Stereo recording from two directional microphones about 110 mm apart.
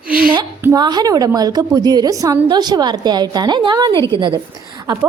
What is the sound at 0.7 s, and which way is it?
A woman's voice, 40° right (ahead or behind).